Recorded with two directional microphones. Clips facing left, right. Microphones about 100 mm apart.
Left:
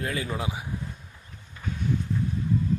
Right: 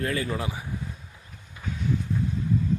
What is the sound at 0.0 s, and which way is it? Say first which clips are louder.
Speech: right 2 dB; 15° left (ahead or behind).